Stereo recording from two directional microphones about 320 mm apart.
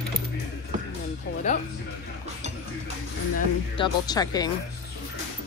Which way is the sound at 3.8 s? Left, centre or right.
Centre.